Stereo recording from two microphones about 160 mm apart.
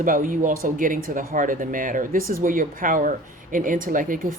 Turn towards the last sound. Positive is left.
turn(degrees=-60)  # may be behind; listen again after turning